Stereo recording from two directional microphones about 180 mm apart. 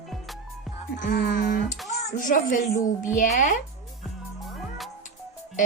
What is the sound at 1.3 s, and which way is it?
A child's voice, 50° left (ahead or behind).